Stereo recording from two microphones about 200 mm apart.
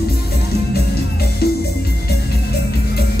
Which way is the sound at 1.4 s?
55° left (ahead or behind).